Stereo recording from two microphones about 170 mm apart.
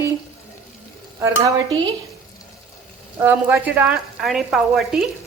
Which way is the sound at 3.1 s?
10° right (ahead or behind).